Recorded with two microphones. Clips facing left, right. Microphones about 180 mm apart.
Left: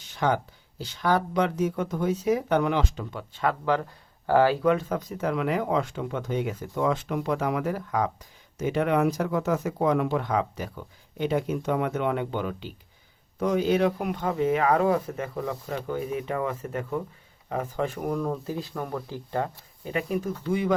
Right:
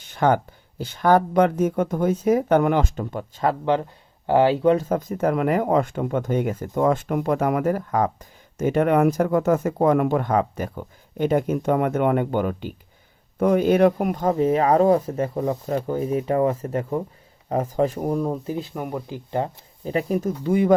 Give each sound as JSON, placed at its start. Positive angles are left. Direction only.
{"t": 0.0, "sound": "speech", "side_deg": -55}
{"t": 4.3, "sound": "speech", "side_deg": -20}
{"t": 18.2, "sound": "speech", "side_deg": -20}
{"t": 19.8, "sound": "speech", "side_deg": -35}